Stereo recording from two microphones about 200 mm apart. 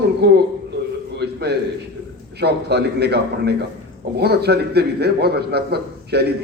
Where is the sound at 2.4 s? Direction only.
55° right (ahead or behind).